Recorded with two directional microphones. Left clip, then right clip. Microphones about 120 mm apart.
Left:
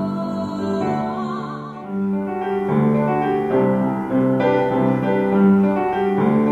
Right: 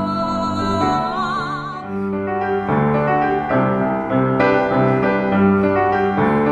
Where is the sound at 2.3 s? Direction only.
30° right (ahead or behind).